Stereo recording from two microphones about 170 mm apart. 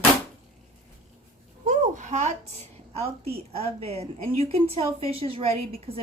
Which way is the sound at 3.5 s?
35° right (ahead or behind).